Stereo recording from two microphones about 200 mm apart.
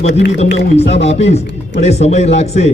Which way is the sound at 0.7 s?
30° left (ahead or behind).